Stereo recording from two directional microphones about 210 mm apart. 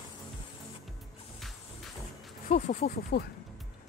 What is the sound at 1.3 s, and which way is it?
Music, centre (ahead or behind).